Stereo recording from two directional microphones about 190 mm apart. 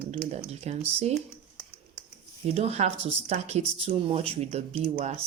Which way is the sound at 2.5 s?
35° right (ahead or behind).